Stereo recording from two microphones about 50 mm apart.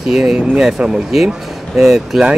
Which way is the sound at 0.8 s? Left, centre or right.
Right.